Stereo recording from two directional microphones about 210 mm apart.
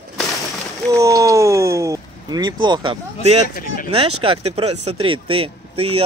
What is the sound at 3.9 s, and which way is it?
Speech, 25° right (ahead or behind).